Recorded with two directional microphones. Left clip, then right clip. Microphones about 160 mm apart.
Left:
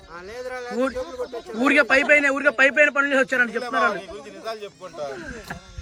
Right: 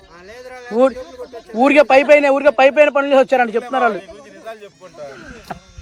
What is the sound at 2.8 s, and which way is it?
Speech, 30° right (ahead or behind).